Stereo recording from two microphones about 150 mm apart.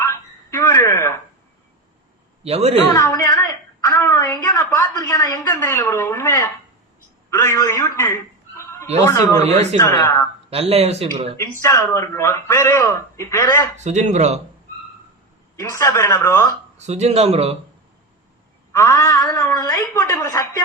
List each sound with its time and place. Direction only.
0.0 s a sound: 20° left (ahead or behind)
2.4 s a woman's voice: 45° right (ahead or behind)
2.9 s a woman's voice: 20° left (ahead or behind)
7.9 s fowl: 20° left (ahead or behind)
9.0 s speech: 20° left (ahead or behind)
9.4 s speech: 45° right (ahead or behind)
9.7 s speech: 20° left (ahead or behind)
10.5 s speech: 40° right (ahead or behind)
11.6 s speech: 20° left (ahead or behind)
13.7 s speech: 50° right (ahead or behind)
15.7 s speech: 20° left (ahead or behind)
16.7 s speech: 50° right (ahead or behind)
18.7 s a sound: 20° left (ahead or behind)
19.4 s speech: 25° left (ahead or behind)